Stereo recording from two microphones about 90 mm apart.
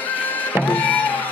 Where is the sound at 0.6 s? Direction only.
15° left (ahead or behind).